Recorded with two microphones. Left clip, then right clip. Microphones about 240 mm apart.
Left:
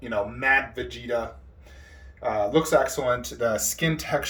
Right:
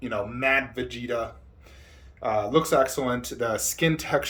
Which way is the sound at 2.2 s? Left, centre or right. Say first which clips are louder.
Even; centre.